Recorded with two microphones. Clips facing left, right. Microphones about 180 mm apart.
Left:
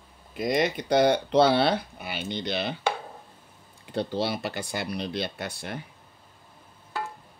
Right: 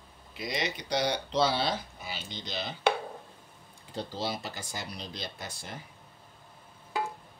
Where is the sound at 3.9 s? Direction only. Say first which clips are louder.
Left 7 dB; 65° left (ahead or behind).